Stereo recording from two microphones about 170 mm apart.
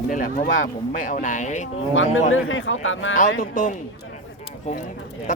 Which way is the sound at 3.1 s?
50° left (ahead or behind).